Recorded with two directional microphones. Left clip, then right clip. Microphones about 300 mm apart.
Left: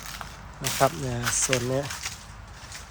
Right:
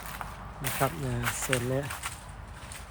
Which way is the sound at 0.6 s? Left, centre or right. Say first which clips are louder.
Left 7 dB; centre.